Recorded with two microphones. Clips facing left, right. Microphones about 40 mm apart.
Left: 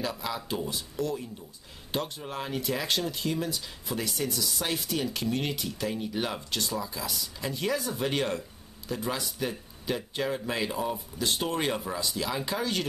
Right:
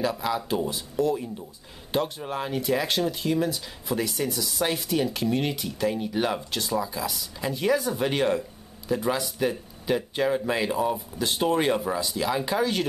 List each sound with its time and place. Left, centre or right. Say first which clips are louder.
0.0 s speech: right 6 dB; centre